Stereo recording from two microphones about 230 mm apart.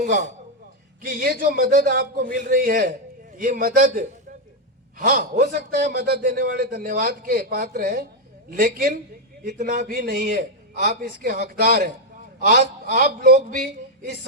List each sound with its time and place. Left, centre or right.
0.0 s a man's voice: right